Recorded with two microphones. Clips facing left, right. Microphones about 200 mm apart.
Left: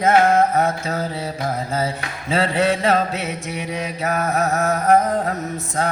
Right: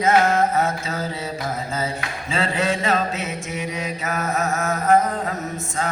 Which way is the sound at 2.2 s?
60° left (ahead or behind).